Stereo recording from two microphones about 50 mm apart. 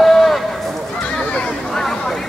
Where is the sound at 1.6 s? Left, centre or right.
Centre.